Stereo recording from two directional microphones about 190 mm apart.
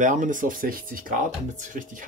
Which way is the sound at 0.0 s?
40° right (ahead or behind).